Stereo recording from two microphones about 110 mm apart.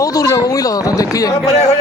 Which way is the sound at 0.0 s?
35° left (ahead or behind).